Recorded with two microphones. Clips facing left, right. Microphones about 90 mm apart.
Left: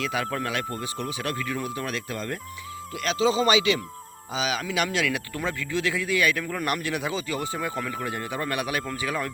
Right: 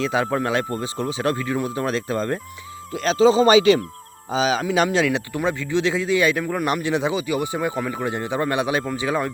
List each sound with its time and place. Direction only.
0.0 s speech: 30° right (ahead or behind)
5.3 s speech: 20° right (ahead or behind)